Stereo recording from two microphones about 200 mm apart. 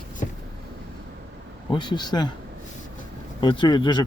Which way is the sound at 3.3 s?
25° left (ahead or behind).